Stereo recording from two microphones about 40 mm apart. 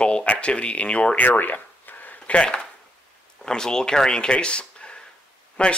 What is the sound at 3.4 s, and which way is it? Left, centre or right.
Speech, centre.